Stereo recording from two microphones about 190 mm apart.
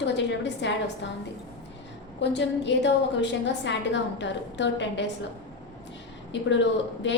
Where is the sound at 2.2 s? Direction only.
70° left (ahead or behind).